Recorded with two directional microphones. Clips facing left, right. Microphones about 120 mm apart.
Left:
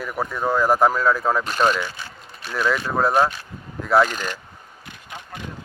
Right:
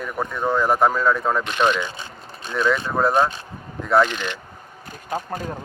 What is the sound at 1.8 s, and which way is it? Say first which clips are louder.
Speech: right 1 dB; 20° right (ahead or behind).